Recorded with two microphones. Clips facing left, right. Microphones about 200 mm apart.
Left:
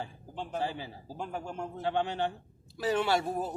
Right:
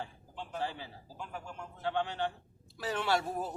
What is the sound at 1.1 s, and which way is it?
Speech, 35° left (ahead or behind).